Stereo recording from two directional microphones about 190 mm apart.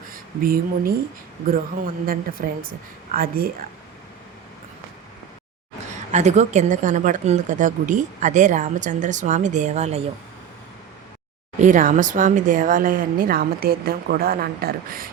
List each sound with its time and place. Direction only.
0.1 s speech: 50° right (ahead or behind)
6.1 s a woman's voice: 35° right (ahead or behind)
11.6 s speech: 45° right (ahead or behind)